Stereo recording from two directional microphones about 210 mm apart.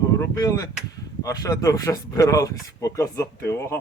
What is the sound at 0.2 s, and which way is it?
Speech, 15° left (ahead or behind).